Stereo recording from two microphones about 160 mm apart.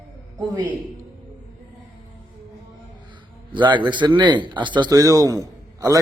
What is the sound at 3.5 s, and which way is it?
A man's voice, 30° right (ahead or behind).